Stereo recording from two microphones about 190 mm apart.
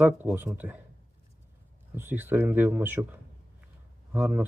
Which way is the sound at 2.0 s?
10° right (ahead or behind).